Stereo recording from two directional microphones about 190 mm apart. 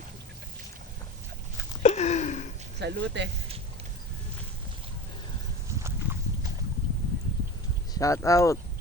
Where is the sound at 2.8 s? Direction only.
65° right (ahead or behind).